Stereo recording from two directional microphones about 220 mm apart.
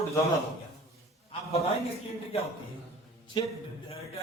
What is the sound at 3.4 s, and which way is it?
Speech, 20° left (ahead or behind).